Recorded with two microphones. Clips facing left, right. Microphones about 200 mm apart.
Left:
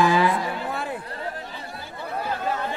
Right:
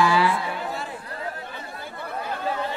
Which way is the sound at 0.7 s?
55° left (ahead or behind).